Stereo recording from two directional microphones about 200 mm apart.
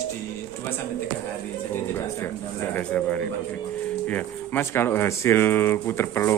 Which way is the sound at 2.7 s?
10° left (ahead or behind).